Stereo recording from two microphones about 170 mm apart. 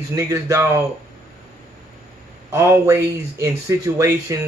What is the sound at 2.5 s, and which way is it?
A man's voice, 15° right (ahead or behind).